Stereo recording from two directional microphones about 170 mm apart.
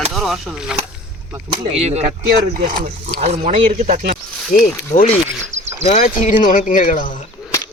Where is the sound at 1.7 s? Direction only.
40° right (ahead or behind).